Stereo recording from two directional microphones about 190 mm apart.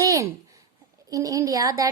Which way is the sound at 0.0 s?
15° right (ahead or behind).